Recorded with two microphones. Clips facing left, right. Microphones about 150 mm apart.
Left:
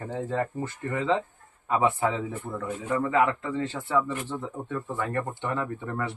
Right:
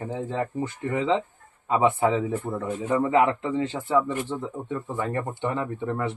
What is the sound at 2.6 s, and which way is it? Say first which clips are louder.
Speech: right 2 dB; 25° right (ahead or behind).